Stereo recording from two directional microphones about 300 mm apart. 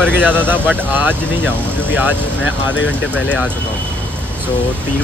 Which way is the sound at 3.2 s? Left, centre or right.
Centre.